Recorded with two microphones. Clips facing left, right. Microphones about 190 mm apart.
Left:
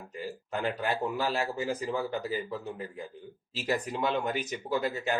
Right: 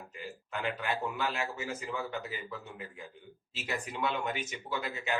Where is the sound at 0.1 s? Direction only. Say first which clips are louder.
Left 7 dB; 35° left (ahead or behind).